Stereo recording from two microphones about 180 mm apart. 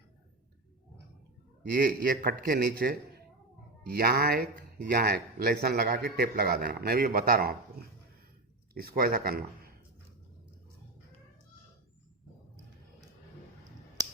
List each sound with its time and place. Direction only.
1.7 s a man's voice: 55° right (ahead or behind)
8.7 s speech: 55° right (ahead or behind)